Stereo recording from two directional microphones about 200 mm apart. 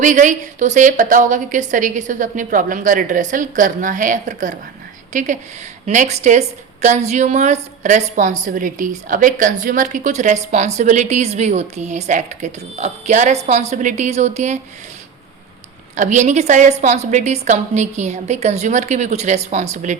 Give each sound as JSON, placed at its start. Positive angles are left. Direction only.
{"t": 0.0, "sound": "a woman's voice", "side_deg": -40}
{"t": 16.0, "sound": "a woman's voice", "side_deg": -35}